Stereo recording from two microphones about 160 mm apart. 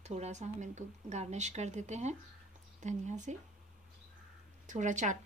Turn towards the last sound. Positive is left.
turn(degrees=-50)  # may be behind; listen again after turning